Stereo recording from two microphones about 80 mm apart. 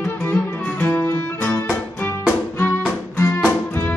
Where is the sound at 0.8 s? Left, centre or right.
Left.